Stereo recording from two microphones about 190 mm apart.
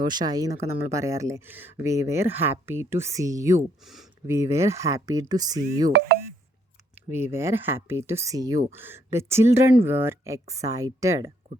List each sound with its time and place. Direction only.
0.0 s speech: 20° right (ahead or behind)
5.9 s speech: 60° right (ahead or behind)
7.1 s speech: 15° right (ahead or behind)